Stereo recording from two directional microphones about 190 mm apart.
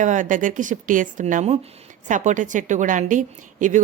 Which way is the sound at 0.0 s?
40° right (ahead or behind).